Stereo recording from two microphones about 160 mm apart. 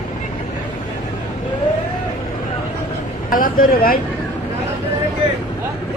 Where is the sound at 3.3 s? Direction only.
60° left (ahead or behind).